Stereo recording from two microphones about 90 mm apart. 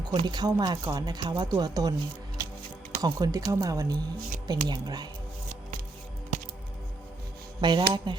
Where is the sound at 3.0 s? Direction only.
45° right (ahead or behind).